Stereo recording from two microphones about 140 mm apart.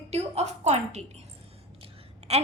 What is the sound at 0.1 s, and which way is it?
Speech, 50° right (ahead or behind).